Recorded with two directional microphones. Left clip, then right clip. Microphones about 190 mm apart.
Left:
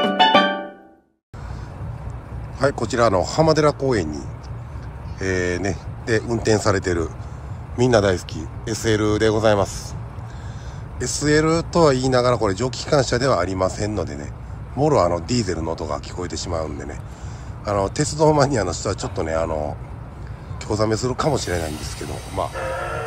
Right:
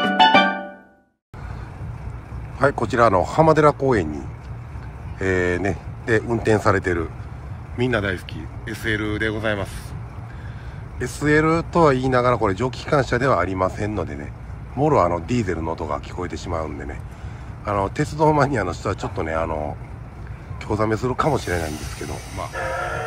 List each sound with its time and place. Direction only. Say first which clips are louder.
2.6 s speech: right 1 dB; 5° left (ahead or behind)
7.7 s speech: left 5 dB; 20° left (ahead or behind)
11.1 s speech: even; 5° left (ahead or behind)